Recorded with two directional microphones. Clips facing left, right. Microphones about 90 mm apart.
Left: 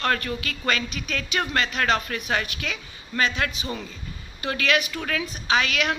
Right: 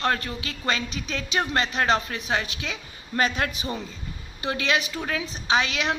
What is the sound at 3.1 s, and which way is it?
Speech, 40° right (ahead or behind).